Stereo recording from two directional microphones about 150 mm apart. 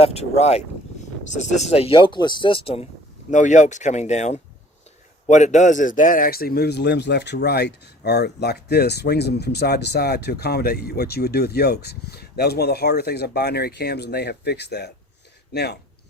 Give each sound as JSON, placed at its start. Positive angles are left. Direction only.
{"t": 0.0, "sound": "speech", "side_deg": 45}
{"t": 3.2, "sound": "a man's voice", "side_deg": 55}